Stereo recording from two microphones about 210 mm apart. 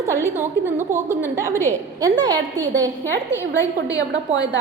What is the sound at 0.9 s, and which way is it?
A woman's voice, 15° right (ahead or behind).